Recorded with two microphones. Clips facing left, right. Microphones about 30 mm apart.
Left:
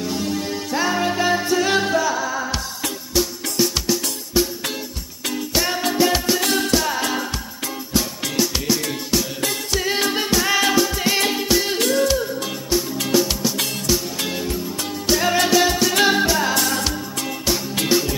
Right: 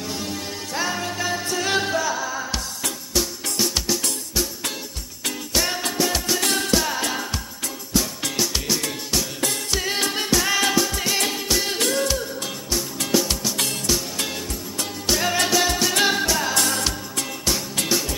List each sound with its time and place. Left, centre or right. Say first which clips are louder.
0.0 s music: left 5 dB; centre
1.0 s music: left 6 dB; centre
1.6 s music: left 4 dB; centre
4.4 s music: left 7 dB; centre
5.5 s music: left 3 dB; centre
6.3 s music: left 2 dB; centre
8.4 s music: left 4 dB; centre